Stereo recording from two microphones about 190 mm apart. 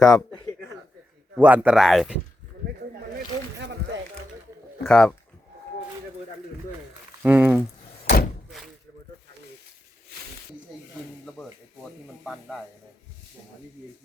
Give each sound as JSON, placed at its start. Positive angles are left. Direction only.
{"t": 0.0, "sound": "speech", "side_deg": 5}
{"t": 1.4, "sound": "speech", "side_deg": -10}
{"t": 4.9, "sound": "speech", "side_deg": 5}
{"t": 7.2, "sound": "speech", "side_deg": -10}
{"t": 8.0, "sound": "door", "side_deg": 50}
{"t": 8.4, "sound": "a sound", "side_deg": 0}
{"t": 11.8, "sound": "a sound", "side_deg": 0}